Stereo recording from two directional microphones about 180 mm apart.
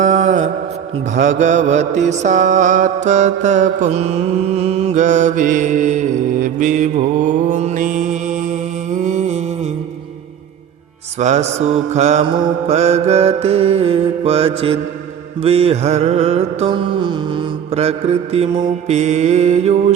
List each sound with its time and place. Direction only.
0.0 s mantra: 45° right (ahead or behind)
9.0 s a sound: 45° right (ahead or behind)
11.2 s mantra: 40° right (ahead or behind)
18.9 s mantra: 40° right (ahead or behind)